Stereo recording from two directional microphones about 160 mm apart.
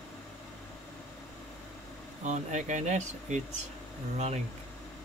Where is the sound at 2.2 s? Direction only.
45° right (ahead or behind).